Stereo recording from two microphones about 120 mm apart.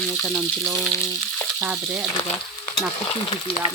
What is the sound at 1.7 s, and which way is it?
Speech, 10° right (ahead or behind).